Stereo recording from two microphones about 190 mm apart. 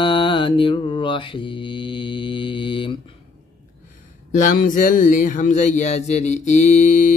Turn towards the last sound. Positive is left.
turn(degrees=40)  # may be behind; listen again after turning